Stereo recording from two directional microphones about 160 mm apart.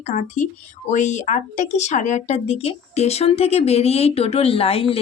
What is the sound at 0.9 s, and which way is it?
Speech, 50° left (ahead or behind).